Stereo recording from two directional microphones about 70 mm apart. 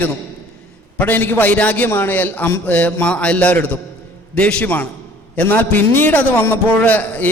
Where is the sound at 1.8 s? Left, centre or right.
Left.